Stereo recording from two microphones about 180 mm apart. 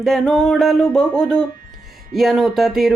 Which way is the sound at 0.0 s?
Centre (ahead or behind).